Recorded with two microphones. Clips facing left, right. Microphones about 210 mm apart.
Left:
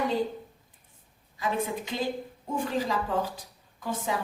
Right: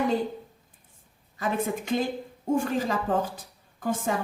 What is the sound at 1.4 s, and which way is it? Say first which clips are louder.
A woman's voice: right 2 dB; 50° right (ahead or behind).